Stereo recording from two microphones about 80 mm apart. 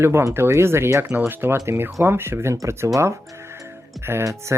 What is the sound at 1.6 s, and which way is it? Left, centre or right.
Speech, right.